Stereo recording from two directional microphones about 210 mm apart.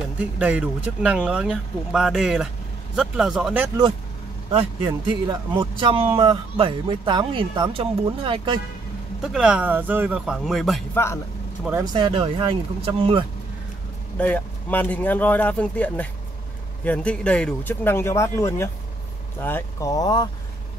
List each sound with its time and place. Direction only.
0.2 s speech: 5° right (ahead or behind)
4.5 s a man's voice: 25° right (ahead or behind)
9.2 s speech: 5° right (ahead or behind)
11.0 s speech: 10° left (ahead or behind)
11.8 s a man's voice: 20° right (ahead or behind)
14.1 s speech: 5° left (ahead or behind)